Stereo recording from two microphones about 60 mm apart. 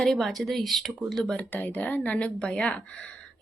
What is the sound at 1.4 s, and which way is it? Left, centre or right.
Speech, left.